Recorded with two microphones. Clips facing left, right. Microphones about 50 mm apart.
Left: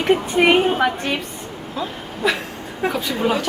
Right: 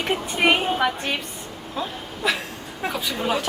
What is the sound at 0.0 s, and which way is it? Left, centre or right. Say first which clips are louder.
Speech: left 5 dB; centre.